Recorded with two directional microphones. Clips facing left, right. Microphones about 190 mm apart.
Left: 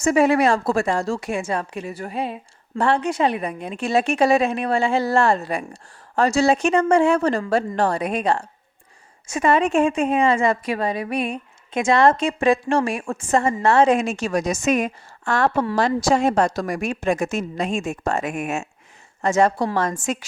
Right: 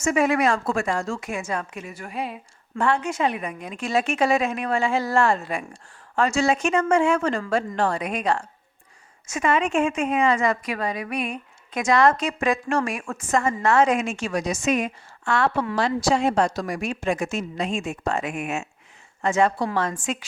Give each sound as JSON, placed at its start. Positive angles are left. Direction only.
{"t": 0.0, "sound": "a woman's voice", "side_deg": 35}